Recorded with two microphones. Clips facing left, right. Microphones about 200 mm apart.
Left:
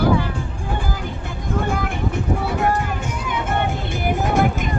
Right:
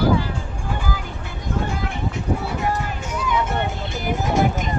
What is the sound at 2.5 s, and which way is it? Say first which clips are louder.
Music: left 3 dB; 55° left (ahead or behind).